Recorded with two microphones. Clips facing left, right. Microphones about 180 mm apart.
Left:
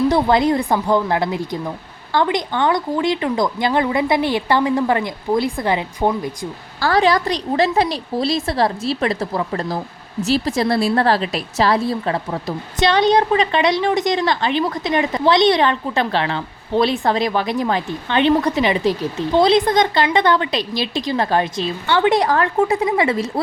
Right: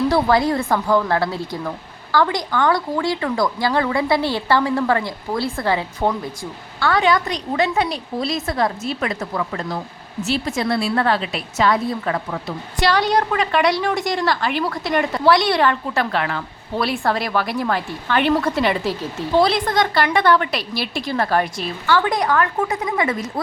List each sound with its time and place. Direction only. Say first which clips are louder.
0.1 s a woman's voice: left 2 dB; 20° left (ahead or behind)
6.7 s a woman's voice: left 2 dB; 35° left (ahead or behind)